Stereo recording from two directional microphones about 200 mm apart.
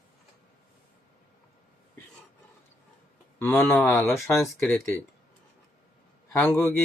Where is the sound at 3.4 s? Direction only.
10° left (ahead or behind).